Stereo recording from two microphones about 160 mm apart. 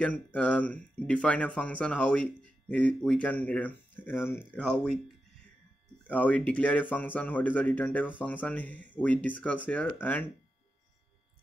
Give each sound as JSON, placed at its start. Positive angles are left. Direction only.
{"t": 0.0, "sound": "speech", "side_deg": 10}